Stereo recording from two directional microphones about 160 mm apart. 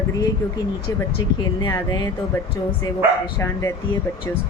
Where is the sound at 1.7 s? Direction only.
20° left (ahead or behind).